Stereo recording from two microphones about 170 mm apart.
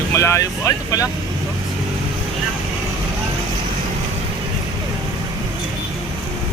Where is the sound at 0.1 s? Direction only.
15° left (ahead or behind).